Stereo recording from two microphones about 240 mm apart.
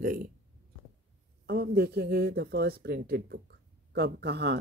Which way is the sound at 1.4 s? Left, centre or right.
Right.